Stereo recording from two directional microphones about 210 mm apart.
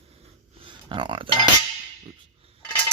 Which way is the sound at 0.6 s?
25° right (ahead or behind).